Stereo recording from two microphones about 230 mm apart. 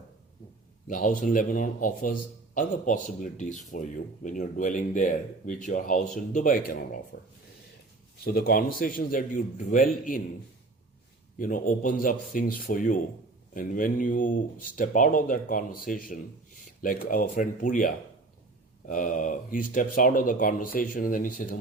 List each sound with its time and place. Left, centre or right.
0.9 s speech: left
8.2 s speech: left
11.3 s speech: left